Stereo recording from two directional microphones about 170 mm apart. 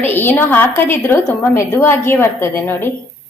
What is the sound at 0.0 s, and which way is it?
A woman's voice, 10° left (ahead or behind).